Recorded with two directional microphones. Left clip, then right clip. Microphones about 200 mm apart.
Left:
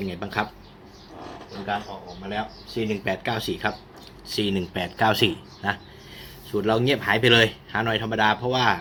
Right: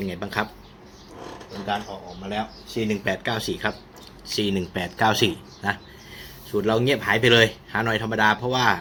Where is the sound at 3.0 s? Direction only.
5° right (ahead or behind).